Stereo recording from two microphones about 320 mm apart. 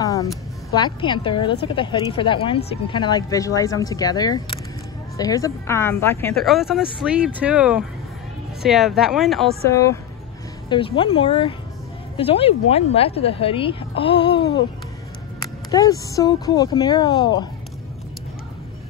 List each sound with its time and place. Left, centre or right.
0.0 s a sound: centre
0.7 s a woman's voice: centre
14.3 s music: left
15.7 s speech: centre